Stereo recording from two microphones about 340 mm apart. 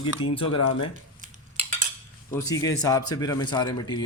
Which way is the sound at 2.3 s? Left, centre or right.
Centre.